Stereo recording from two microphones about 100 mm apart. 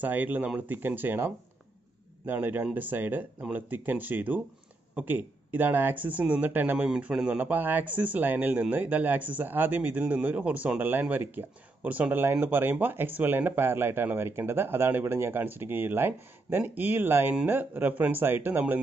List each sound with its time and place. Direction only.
0.0 s speech: 15° right (ahead or behind)